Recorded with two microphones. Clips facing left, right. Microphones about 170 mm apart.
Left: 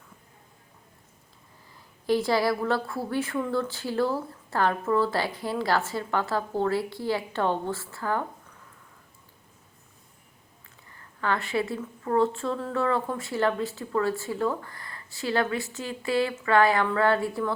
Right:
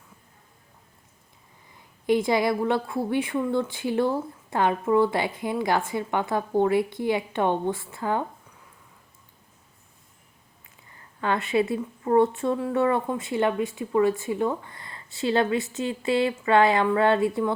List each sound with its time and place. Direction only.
2.0 s a woman's voice: 20° right (ahead or behind)
10.9 s a woman's voice: 20° right (ahead or behind)